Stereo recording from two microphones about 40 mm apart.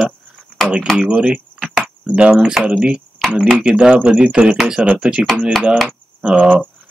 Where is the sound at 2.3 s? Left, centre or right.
Centre; by 4.5 s right.